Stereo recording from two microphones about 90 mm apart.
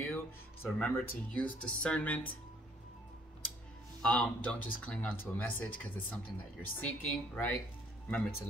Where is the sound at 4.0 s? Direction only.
10° left (ahead or behind).